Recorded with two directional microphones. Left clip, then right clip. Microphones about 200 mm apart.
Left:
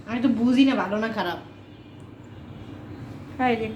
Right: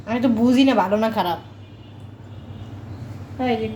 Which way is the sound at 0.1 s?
50° right (ahead or behind).